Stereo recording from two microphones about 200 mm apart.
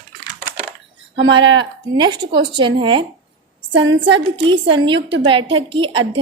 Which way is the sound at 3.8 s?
65° right (ahead or behind).